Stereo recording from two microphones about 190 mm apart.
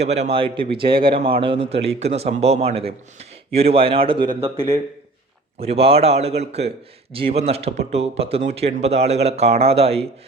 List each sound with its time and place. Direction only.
0.0 s a man's voice: 35° right (ahead or behind)